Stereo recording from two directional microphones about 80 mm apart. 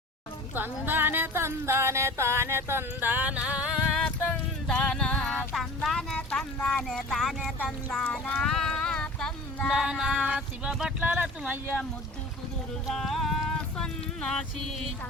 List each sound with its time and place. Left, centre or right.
0.5 s music: right
4.0 s music: centre
6.6 s speech: centre
8.3 s a sound: centre
9.7 s a sound: centre
11.0 s speech: centre
12.9 s music: centre
13.7 s speech: centre